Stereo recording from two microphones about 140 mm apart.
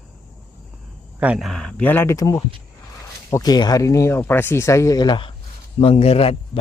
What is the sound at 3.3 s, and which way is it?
Speech, 30° left (ahead or behind).